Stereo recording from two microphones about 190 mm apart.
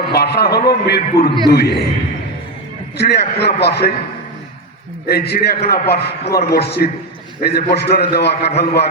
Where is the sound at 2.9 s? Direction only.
60° left (ahead or behind).